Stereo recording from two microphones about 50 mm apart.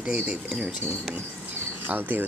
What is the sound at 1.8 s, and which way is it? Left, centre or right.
Speech, right.